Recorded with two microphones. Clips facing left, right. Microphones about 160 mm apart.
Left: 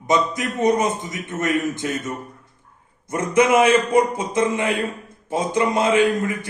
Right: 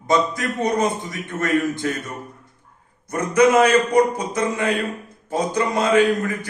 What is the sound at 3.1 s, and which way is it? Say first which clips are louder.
A man's voice: right 1 dB; 25° left (ahead or behind).